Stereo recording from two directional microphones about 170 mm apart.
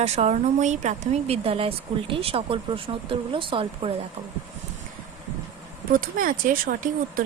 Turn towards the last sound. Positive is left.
turn(degrees=-55)  # may be behind; listen again after turning